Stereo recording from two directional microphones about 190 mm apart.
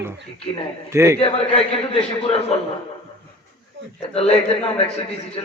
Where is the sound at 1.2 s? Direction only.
30° left (ahead or behind).